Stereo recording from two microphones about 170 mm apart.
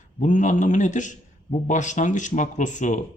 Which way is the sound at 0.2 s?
45° left (ahead or behind).